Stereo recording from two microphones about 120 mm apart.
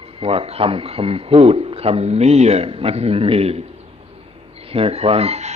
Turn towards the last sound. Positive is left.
turn(degrees=-65)  # may be behind; listen again after turning